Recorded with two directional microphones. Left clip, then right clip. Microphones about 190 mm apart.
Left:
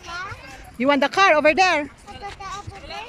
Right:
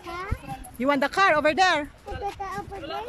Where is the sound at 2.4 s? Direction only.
45° right (ahead or behind).